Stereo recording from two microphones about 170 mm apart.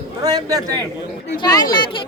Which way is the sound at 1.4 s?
25° left (ahead or behind).